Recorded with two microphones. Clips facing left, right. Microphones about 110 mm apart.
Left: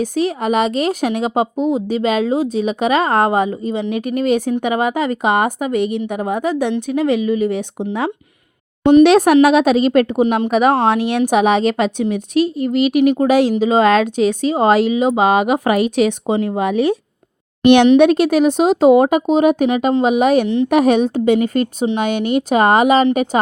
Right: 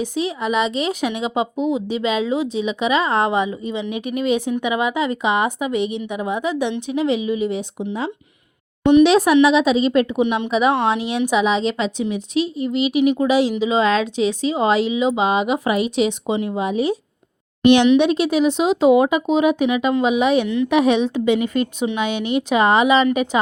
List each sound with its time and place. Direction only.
0.0 s a woman's voice: 50° left (ahead or behind)